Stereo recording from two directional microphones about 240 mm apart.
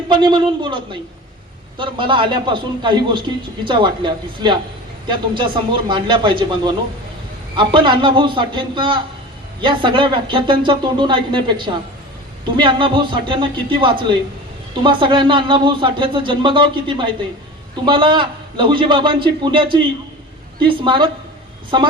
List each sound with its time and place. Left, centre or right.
0.1 s a man's voice: centre